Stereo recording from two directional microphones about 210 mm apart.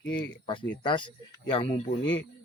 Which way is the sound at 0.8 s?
25° left (ahead or behind).